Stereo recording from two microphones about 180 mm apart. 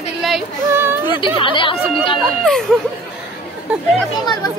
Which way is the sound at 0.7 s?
10° right (ahead or behind).